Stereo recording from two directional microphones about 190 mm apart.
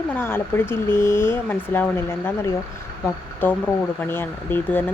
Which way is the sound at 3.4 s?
10° left (ahead or behind).